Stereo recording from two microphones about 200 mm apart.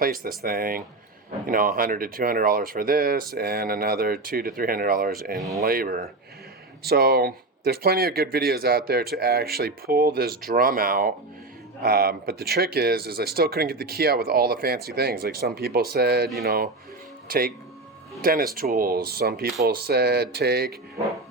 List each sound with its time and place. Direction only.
0.0 s speech: 45° right (ahead or behind)